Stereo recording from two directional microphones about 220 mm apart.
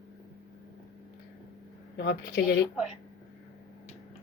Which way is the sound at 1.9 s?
50° left (ahead or behind).